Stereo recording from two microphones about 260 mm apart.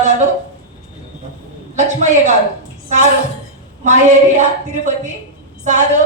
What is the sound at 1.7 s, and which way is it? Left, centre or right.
Speech, right.